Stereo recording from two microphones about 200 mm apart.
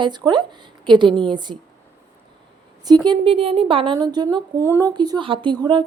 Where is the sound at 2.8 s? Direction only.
20° right (ahead or behind).